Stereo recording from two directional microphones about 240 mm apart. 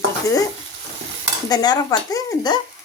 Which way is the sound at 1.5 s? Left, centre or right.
Centre.